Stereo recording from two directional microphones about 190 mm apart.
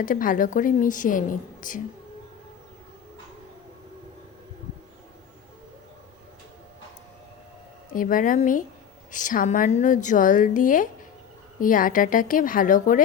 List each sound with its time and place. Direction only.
0.0 s a woman's voice: 45° left (ahead or behind)
7.9 s a woman's voice: 45° left (ahead or behind)